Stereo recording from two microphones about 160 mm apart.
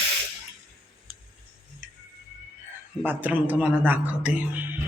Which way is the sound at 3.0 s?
10° right (ahead or behind).